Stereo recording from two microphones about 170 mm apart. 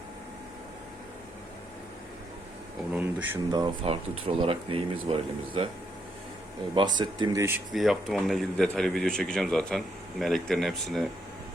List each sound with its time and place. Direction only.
2.9 s speech: 10° right (ahead or behind)
3.5 s speech: 30° right (ahead or behind)
6.7 s speech: 25° right (ahead or behind)
7.7 s speech: centre (ahead or behind)